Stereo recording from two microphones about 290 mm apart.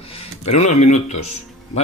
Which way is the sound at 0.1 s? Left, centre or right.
Left.